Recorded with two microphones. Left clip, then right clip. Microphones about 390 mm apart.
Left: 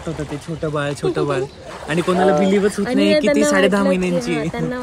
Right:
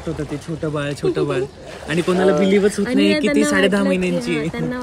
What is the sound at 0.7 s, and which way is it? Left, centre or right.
Speech, centre.